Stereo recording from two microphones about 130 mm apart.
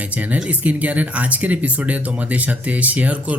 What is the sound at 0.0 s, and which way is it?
Speech, 10° right (ahead or behind).